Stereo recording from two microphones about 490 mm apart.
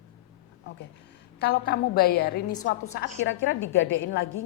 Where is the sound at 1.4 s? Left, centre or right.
Centre.